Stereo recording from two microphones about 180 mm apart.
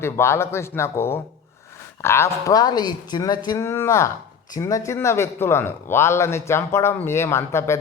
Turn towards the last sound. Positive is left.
turn(degrees=15)  # may be behind; listen again after turning